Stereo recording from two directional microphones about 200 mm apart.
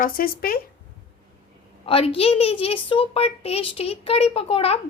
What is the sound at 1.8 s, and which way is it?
A woman's voice, 30° left (ahead or behind).